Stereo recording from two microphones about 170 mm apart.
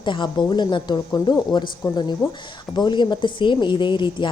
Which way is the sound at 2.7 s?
25° left (ahead or behind).